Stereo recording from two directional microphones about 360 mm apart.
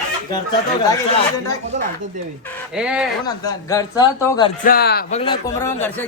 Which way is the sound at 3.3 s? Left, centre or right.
Centre.